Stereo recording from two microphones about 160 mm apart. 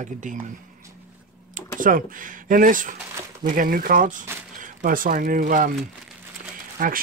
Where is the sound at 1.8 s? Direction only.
60° right (ahead or behind).